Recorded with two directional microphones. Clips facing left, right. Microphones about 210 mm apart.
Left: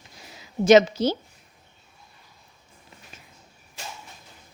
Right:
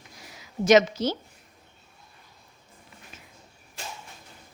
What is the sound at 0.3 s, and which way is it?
Speech, 30° left (ahead or behind).